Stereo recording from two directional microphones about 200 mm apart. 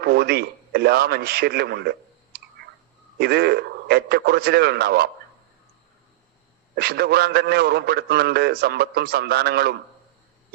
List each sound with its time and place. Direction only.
0.0 s a man's voice: 55° right (ahead or behind)
6.7 s a man's voice: 55° right (ahead or behind)